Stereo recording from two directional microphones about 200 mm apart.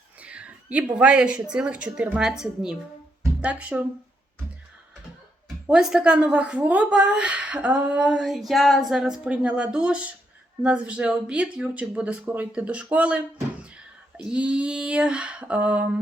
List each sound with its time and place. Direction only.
0.2 s a sound: 5° right (ahead or behind)
0.9 s a woman's voice: 5° right (ahead or behind)
5.6 s a woman's voice: 5° right (ahead or behind)